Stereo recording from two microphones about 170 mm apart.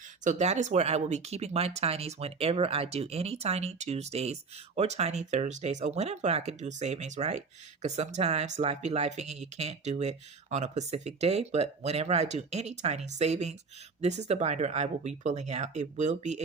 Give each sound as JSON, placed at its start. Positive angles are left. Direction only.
{"t": 0.3, "sound": "speech", "side_deg": -45}